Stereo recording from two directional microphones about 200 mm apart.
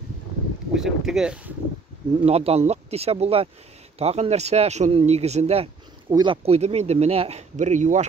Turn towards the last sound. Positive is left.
turn(degrees=-35)  # may be behind; listen again after turning